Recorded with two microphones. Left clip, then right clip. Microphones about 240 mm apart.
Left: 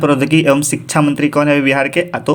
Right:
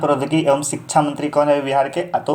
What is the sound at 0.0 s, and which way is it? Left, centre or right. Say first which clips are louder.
A man's voice: left 5 dB; left.